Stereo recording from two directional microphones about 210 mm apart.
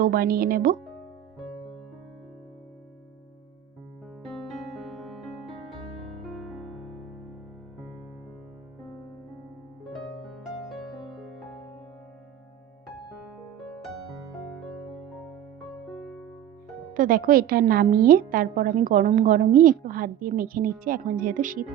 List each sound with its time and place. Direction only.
0.0 s speech: 45° right (ahead or behind)
4.4 s music: centre (ahead or behind)
10.2 s music: centre (ahead or behind)
13.1 s music: centre (ahead or behind)
15.7 s music: centre (ahead or behind)
16.9 s a woman's voice: 40° right (ahead or behind)